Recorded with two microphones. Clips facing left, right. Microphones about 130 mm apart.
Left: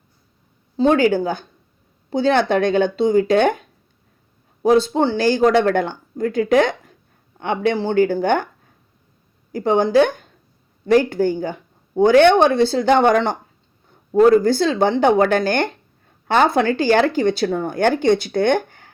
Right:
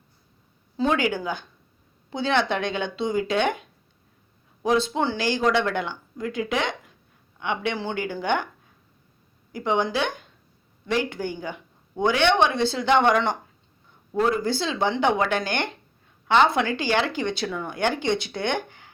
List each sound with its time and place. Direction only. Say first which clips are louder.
0.8 s speech: left 8 dB; 35° left (ahead or behind)
9.5 s speech: left 7 dB; 40° left (ahead or behind)